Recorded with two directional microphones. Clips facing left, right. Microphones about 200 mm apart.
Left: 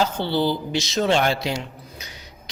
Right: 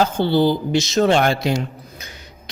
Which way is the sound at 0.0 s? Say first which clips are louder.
Right 5 dB; 50° right (ahead or behind).